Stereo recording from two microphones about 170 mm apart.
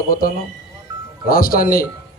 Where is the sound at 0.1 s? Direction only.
55° left (ahead or behind).